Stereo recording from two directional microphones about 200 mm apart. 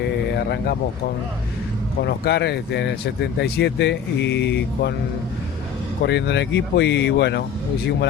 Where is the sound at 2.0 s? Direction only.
55° left (ahead or behind).